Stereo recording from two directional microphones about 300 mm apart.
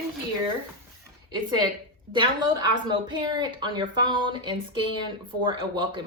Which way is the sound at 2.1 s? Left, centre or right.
Centre.